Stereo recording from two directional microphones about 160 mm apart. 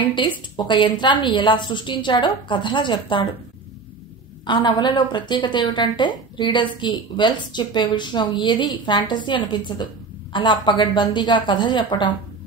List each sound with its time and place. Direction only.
0.0 s a woman's voice: 30° left (ahead or behind)
4.5 s a woman's voice: 30° left (ahead or behind)